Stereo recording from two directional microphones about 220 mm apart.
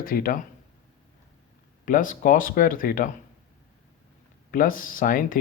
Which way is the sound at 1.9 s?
35° left (ahead or behind).